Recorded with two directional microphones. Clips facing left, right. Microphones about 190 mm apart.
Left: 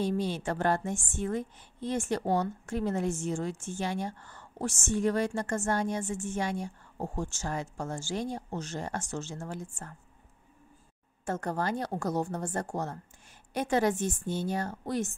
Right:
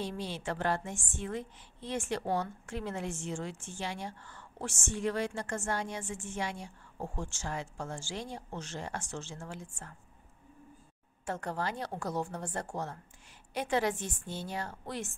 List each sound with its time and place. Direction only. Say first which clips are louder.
0.0 s a woman's voice: left 7 dB; 45° left (ahead or behind)
11.2 s a woman's voice: left 4 dB; 45° left (ahead or behind)